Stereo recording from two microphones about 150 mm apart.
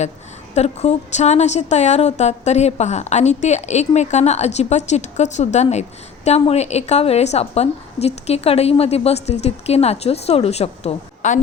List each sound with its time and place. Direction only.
0.5 s a woman's voice: 45° left (ahead or behind)